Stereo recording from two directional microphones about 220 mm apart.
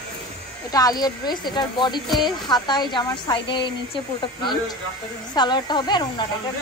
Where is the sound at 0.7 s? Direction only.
15° left (ahead or behind).